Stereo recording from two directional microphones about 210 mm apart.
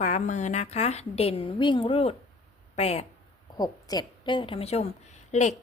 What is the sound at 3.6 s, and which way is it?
A woman's voice, 20° left (ahead or behind).